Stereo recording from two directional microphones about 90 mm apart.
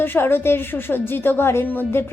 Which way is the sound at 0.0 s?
25° left (ahead or behind).